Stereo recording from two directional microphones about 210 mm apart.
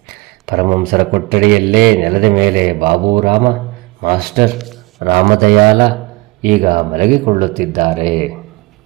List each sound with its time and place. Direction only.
0.4 s a man's voice: 40° right (ahead or behind)